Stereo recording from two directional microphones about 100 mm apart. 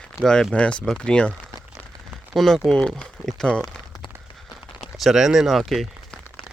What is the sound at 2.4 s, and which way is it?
Speech, centre (ahead or behind).